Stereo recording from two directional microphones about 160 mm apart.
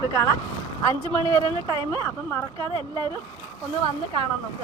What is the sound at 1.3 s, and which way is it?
Speech, 35° right (ahead or behind).